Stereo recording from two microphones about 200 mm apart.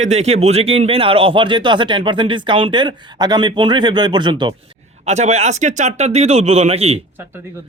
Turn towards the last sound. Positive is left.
turn(degrees=-15)  # may be behind; listen again after turning